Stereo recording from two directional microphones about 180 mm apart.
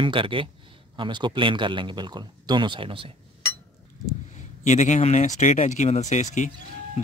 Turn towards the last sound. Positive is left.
turn(degrees=40)  # may be behind; listen again after turning